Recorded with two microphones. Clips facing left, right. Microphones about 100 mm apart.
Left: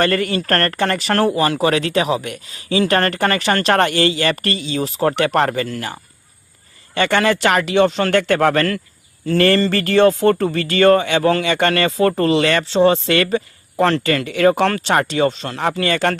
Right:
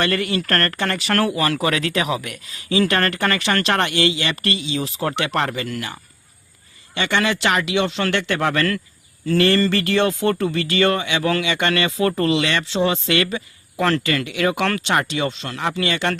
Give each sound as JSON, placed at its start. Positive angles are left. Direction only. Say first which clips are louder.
{"t": 0.0, "sound": "speech", "louder": "left 3 dB", "side_deg": 40}
{"t": 6.9, "sound": "speech", "louder": "left 5 dB", "side_deg": 45}